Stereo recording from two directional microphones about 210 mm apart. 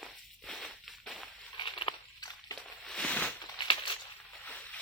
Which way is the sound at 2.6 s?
5° left (ahead or behind).